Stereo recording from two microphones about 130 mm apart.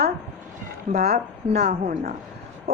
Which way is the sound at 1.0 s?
55° right (ahead or behind).